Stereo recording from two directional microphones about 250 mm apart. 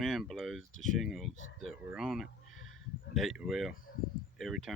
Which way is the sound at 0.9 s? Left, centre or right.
Centre.